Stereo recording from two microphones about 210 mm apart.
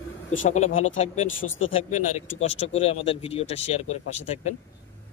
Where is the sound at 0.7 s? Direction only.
75° left (ahead or behind).